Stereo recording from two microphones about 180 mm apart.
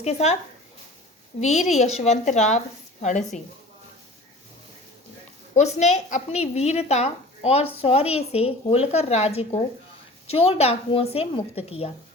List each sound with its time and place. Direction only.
0.0 s speech: 35° left (ahead or behind)
1.7 s speech: 40° left (ahead or behind)
5.5 s speech: 40° left (ahead or behind)